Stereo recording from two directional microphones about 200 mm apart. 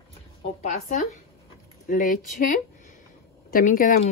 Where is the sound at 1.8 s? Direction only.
45° left (ahead or behind).